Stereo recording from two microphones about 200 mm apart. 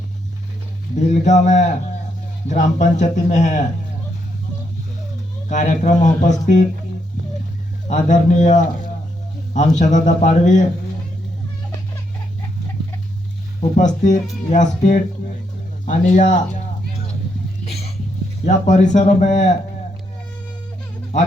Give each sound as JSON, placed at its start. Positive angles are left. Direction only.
{"t": 0.9, "sound": "a man's voice", "side_deg": 35}
{"t": 5.5, "sound": "a man's voice", "side_deg": 35}
{"t": 7.9, "sound": "a man's voice", "side_deg": 40}
{"t": 13.6, "sound": "a man's voice", "side_deg": 40}
{"t": 18.4, "sound": "a man's voice", "side_deg": 35}
{"t": 21.1, "sound": "speech", "side_deg": 35}